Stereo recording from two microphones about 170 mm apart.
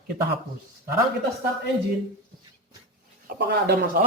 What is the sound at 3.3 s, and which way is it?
Speech, 75° right (ahead or behind).